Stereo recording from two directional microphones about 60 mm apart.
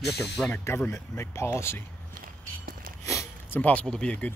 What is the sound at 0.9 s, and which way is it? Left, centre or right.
Speech, left.